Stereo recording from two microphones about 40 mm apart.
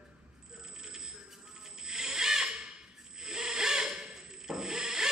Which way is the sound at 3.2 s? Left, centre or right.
Centre.